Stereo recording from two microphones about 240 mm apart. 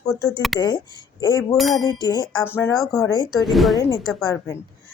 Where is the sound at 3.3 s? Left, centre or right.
Centre.